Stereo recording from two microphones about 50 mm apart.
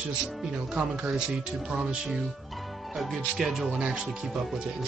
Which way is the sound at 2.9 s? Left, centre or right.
Centre.